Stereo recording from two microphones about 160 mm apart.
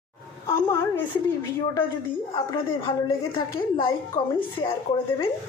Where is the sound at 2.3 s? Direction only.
35° left (ahead or behind).